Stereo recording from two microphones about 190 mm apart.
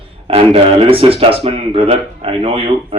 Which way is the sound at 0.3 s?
30° right (ahead or behind).